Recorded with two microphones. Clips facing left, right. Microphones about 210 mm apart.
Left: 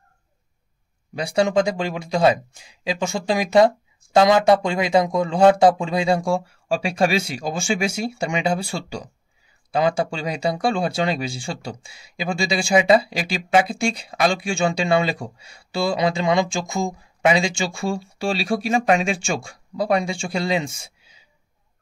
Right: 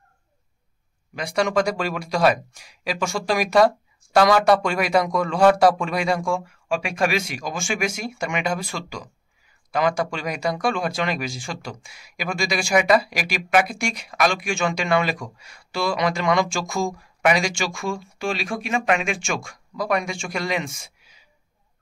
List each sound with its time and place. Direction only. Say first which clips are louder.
1.1 s speech: left 3 dB; 25° left (ahead or behind)